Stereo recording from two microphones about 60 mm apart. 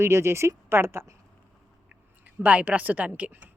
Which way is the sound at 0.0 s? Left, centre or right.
Right.